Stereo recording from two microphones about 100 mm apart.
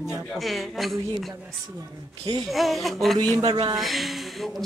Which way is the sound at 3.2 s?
45° right (ahead or behind).